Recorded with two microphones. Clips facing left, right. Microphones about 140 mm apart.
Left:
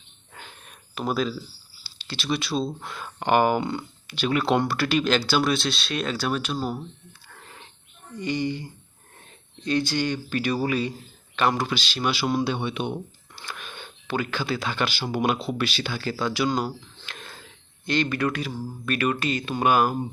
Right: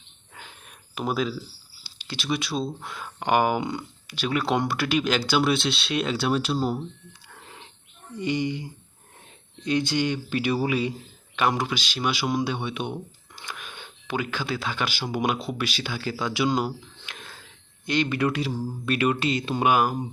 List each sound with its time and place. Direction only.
0.9 s speech: 10° right (ahead or behind)
1.8 s a sound: 15° right (ahead or behind)
2.3 s speech: 10° right (ahead or behind)
8.2 s speech: 20° right (ahead or behind)
9.6 s speech: 20° right (ahead or behind); by 13.0 s 5° right (ahead or behind)
13.3 s a sound: 15° right (ahead or behind)
14.4 s speech: centre (ahead or behind)
16.3 s speech: 20° right (ahead or behind)
17.1 s a sound: 5° right (ahead or behind)
17.8 s speech: 15° right (ahead or behind)
19.6 s speech: 10° right (ahead or behind)